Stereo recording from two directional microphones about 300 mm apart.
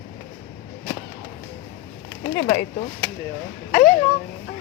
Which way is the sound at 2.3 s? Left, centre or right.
Left.